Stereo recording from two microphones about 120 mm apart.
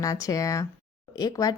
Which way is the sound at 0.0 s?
30° left (ahead or behind).